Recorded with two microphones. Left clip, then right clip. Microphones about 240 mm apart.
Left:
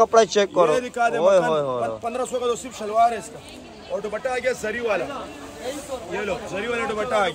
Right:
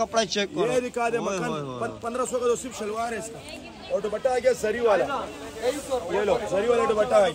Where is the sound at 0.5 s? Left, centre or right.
Left.